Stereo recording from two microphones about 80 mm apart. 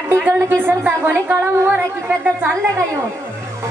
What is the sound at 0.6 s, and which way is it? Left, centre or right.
A woman's voice, right.